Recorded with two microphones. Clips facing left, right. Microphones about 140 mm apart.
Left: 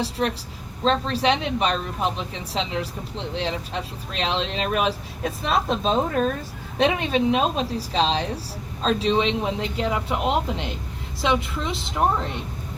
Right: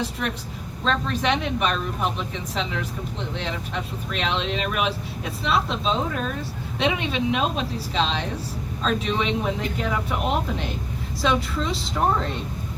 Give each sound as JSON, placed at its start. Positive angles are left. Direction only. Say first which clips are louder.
{"t": 0.0, "sound": "speech", "louder": "left 3 dB", "side_deg": 35}
{"t": 3.3, "sound": "speech", "louder": "left 4 dB", "side_deg": 30}